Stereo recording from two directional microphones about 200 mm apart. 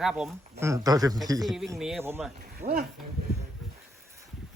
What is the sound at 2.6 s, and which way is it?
Speech, 30° right (ahead or behind).